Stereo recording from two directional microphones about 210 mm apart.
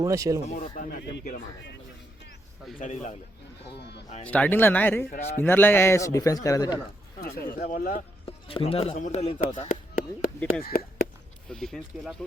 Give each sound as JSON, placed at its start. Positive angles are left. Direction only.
{"t": 0.0, "sound": "speech", "side_deg": -15}
{"t": 0.4, "sound": "speech", "side_deg": 35}
{"t": 2.7, "sound": "speech", "side_deg": 35}
{"t": 4.3, "sound": "speech", "side_deg": 5}
{"t": 7.2, "sound": "speech", "side_deg": 45}
{"t": 8.4, "sound": "a man's voice", "side_deg": 25}
{"t": 11.4, "sound": "speech", "side_deg": 0}